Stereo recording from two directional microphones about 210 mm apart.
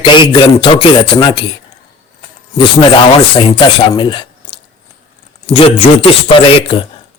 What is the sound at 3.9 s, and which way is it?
Speech, 20° left (ahead or behind).